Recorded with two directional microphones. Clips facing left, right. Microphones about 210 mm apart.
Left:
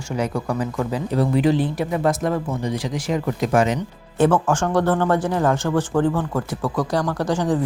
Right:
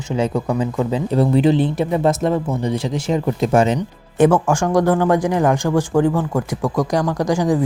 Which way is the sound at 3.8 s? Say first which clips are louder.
Right 4 dB; 10° right (ahead or behind).